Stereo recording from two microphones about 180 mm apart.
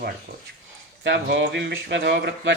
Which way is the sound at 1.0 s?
80° right.